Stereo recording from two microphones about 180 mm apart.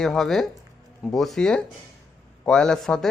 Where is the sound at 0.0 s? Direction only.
Centre (ahead or behind).